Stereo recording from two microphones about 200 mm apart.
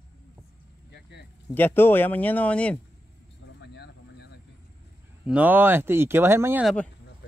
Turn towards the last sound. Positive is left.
turn(degrees=0)  # may be behind; listen again after turning